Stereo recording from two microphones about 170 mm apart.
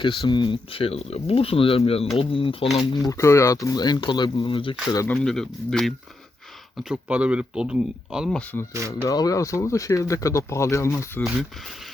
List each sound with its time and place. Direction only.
0.0 s speech: 30° left (ahead or behind)
5.1 s speech: centre (ahead or behind)
9.0 s speech: 20° left (ahead or behind)
11.2 s speech: centre (ahead or behind)